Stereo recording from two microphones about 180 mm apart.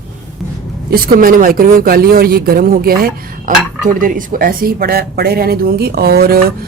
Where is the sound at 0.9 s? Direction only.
50° right (ahead or behind).